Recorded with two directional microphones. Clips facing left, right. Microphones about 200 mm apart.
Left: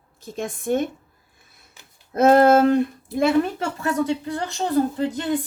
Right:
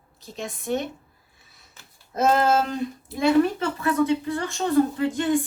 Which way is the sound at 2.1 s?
60° left (ahead or behind).